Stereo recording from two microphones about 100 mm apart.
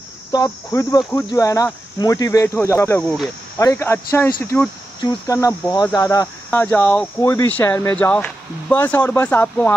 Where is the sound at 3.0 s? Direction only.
5° left (ahead or behind).